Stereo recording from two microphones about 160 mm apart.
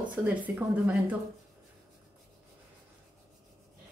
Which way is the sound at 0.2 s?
10° right (ahead or behind).